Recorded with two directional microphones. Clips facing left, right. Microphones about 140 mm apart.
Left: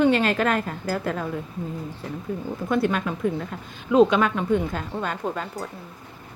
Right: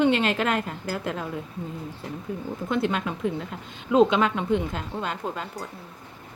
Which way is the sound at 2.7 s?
20° right (ahead or behind).